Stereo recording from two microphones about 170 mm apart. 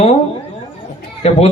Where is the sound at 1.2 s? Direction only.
40° left (ahead or behind).